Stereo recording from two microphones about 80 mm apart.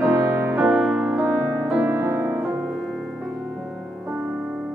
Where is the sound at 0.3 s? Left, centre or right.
Right.